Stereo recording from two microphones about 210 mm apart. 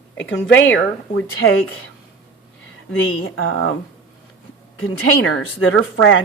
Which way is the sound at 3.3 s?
90° left.